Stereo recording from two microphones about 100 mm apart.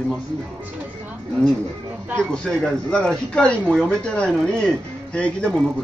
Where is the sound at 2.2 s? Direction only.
10° left (ahead or behind).